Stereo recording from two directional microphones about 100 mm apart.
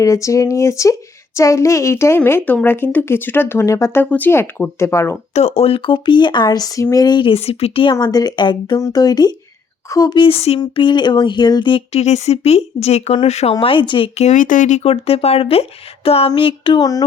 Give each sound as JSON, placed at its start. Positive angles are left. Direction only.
{"t": 0.0, "sound": "speech", "side_deg": 30}
{"t": 5.3, "sound": "speech", "side_deg": 90}
{"t": 7.3, "sound": "speech", "side_deg": 70}
{"t": 8.0, "sound": "speech", "side_deg": 40}
{"t": 10.2, "sound": "speech", "side_deg": 70}
{"t": 10.6, "sound": "speech", "side_deg": 50}
{"t": 11.9, "sound": "speech", "side_deg": 90}
{"t": 14.8, "sound": "speech", "side_deg": 80}
{"t": 16.3, "sound": "speech", "side_deg": 60}